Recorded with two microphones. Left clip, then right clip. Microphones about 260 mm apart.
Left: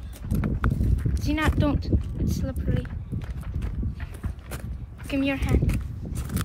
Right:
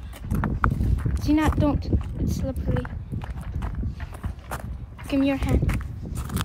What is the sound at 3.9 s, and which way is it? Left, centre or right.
Horse, right.